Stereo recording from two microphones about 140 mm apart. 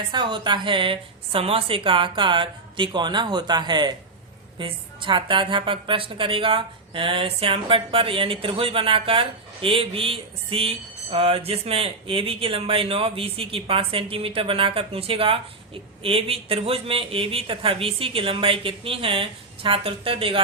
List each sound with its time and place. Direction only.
0.1 s a woman's voice: 35° right (ahead or behind)